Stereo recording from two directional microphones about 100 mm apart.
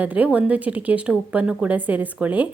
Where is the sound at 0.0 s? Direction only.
15° right (ahead or behind).